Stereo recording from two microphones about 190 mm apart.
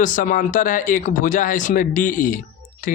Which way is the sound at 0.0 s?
45° left (ahead or behind).